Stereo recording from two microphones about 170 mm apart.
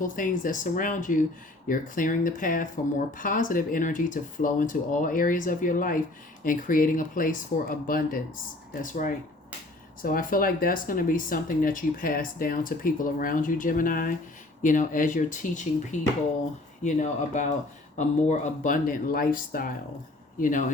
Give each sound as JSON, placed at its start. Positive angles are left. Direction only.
{"t": 0.0, "sound": "speech", "side_deg": 50}